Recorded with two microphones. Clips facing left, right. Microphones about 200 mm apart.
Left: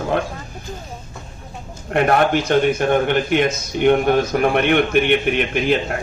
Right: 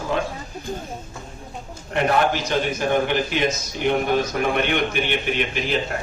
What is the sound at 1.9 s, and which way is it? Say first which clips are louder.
A man's voice: left 4 dB; 55° left (ahead or behind).